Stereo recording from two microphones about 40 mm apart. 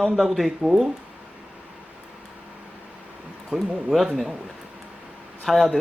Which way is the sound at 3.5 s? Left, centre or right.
Centre.